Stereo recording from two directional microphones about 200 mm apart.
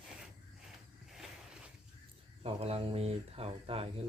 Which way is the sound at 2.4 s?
30° right (ahead or behind).